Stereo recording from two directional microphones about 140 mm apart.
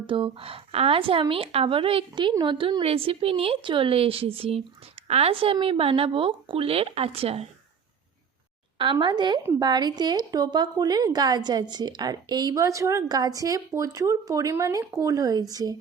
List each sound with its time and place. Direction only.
0.1 s a woman's voice: 40° right (ahead or behind)
8.8 s a woman's voice: 35° right (ahead or behind)